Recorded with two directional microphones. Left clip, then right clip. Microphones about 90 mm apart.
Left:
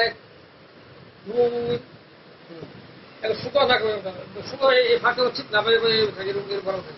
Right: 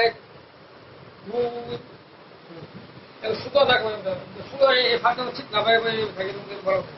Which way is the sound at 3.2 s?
30° right (ahead or behind).